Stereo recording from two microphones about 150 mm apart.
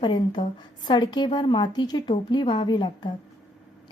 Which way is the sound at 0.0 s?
30° left (ahead or behind).